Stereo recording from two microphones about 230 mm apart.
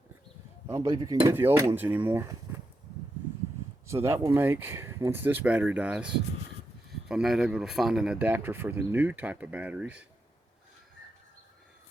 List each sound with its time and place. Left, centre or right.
0.7 s speech: centre
3.8 s speech: centre